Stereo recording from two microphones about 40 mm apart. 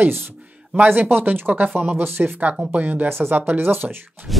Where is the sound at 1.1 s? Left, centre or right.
Right.